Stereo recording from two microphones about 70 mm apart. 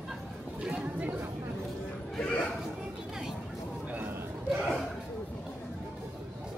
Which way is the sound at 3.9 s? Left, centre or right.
Right.